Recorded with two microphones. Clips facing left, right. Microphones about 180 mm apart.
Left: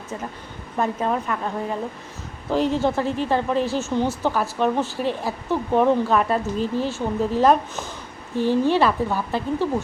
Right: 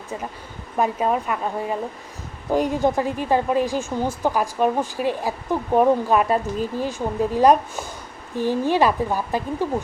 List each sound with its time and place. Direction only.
0.8 s a woman's voice: 10° right (ahead or behind)